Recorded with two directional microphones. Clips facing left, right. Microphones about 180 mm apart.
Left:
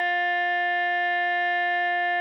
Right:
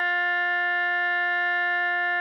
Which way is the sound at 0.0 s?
20° left (ahead or behind).